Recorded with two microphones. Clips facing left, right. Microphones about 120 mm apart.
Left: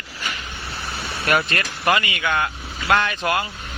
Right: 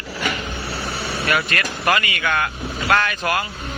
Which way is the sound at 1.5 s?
20° left (ahead or behind).